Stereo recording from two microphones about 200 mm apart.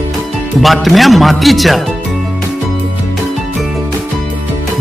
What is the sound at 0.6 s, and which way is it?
Speech, centre (ahead or behind).